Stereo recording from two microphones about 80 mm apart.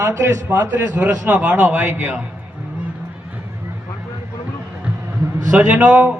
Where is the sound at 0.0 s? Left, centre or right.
Right.